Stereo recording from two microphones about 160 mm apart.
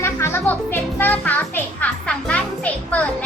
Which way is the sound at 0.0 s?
15° left (ahead or behind).